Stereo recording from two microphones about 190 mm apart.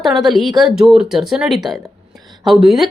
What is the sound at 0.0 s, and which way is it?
Speech, centre (ahead or behind).